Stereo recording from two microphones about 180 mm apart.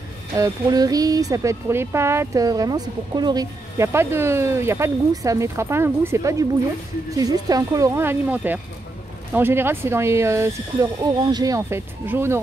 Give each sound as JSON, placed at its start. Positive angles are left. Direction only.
{"t": 0.4, "sound": "speech", "side_deg": -20}